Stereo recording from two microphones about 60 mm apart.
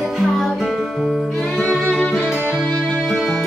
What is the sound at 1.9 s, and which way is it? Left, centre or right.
Music, centre.